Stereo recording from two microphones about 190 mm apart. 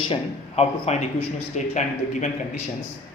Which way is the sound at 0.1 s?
35° left (ahead or behind).